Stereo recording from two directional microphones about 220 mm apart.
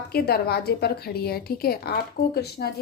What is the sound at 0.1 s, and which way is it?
A woman's voice, 45° left (ahead or behind).